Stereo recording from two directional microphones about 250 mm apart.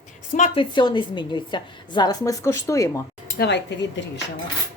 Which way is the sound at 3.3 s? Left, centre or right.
Left.